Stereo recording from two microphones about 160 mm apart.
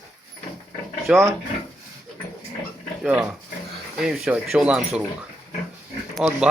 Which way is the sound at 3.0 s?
10° right (ahead or behind).